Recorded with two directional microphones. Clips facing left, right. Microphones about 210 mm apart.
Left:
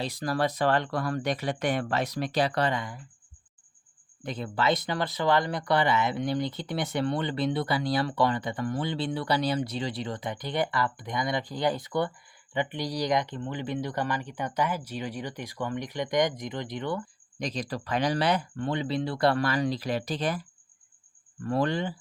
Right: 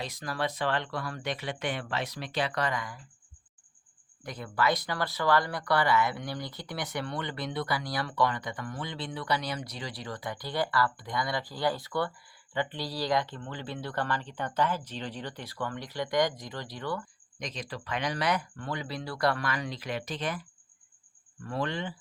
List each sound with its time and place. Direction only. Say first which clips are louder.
0.0 s speech: left 5 dB; 35° left (ahead or behind)
4.2 s speech: left 1 dB; 25° left (ahead or behind)
17.4 s speech: left 6 dB; 35° left (ahead or behind)
21.4 s speech: left 6 dB; 40° left (ahead or behind)